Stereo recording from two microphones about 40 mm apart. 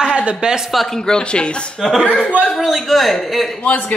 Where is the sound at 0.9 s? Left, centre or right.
Centre.